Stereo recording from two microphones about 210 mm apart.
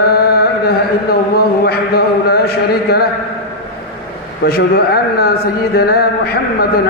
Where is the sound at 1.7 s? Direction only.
50° left (ahead or behind).